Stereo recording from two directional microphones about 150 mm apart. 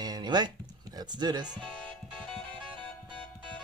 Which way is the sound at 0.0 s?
30° right (ahead or behind).